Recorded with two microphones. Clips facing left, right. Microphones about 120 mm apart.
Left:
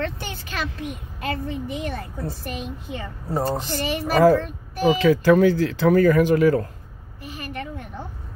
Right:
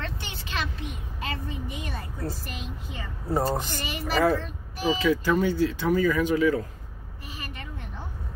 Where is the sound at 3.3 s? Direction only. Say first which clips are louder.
Left 1 dB; 10° right (ahead or behind).